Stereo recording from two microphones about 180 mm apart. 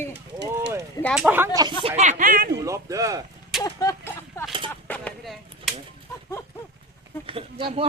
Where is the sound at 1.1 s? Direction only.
10° right (ahead or behind).